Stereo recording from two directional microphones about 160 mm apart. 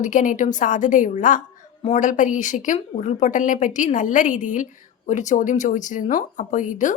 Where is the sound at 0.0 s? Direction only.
55° left (ahead or behind).